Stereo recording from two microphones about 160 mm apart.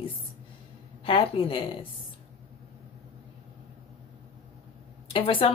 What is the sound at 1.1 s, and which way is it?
Speech, 35° left (ahead or behind).